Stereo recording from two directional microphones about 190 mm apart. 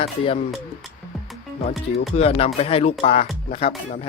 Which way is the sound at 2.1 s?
30° left (ahead or behind).